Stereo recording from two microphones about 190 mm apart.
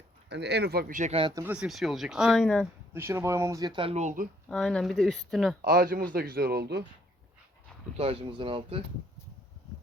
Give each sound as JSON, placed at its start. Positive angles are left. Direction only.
{"t": 0.3, "sound": "speech", "side_deg": -60}
{"t": 1.3, "sound": "speech", "side_deg": -15}
{"t": 1.5, "sound": "speech", "side_deg": 0}
{"t": 2.9, "sound": "speech", "side_deg": -15}
{"t": 4.4, "sound": "speech", "side_deg": 5}
{"t": 5.6, "sound": "speech", "side_deg": -50}
{"t": 7.9, "sound": "speech", "side_deg": -30}